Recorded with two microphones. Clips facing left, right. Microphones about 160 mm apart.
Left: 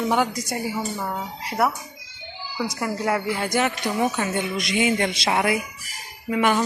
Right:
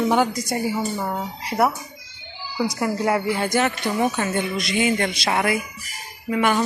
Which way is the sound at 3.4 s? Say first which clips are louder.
Right 2 dB; 10° left (ahead or behind).